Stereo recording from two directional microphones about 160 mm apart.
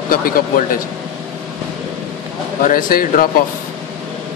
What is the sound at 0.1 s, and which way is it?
Speech, 65° left (ahead or behind).